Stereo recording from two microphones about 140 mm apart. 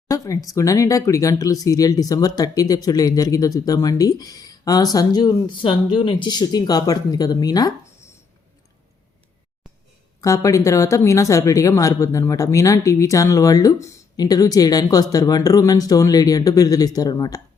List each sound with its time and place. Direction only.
0.1 s speech: 25° left (ahead or behind)
10.2 s speech: 25° left (ahead or behind)